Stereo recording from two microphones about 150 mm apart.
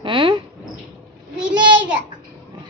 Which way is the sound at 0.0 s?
35° right (ahead or behind).